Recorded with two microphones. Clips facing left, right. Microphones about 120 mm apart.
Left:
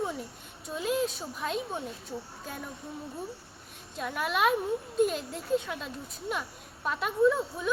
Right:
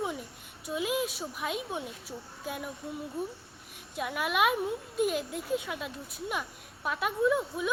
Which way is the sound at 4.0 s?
5° right (ahead or behind).